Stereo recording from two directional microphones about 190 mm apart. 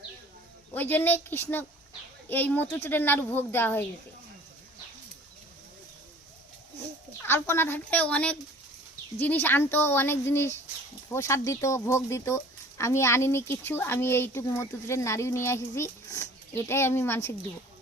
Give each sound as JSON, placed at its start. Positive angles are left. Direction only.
{"t": 0.7, "sound": "speech", "side_deg": 10}
{"t": 7.2, "sound": "speech", "side_deg": 10}